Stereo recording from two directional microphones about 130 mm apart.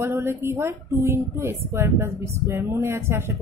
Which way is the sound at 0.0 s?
20° right (ahead or behind).